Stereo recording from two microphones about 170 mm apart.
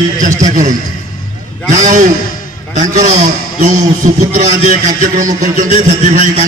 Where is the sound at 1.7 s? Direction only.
45° right (ahead or behind).